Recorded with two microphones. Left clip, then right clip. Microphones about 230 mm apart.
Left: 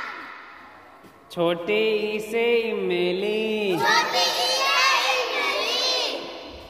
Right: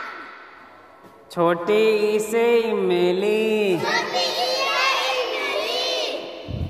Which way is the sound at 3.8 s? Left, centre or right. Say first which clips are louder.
Left 2 dB; left.